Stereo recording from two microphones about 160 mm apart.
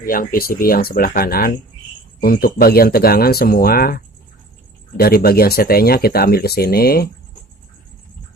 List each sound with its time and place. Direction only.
0.0 s speech: 65° left (ahead or behind)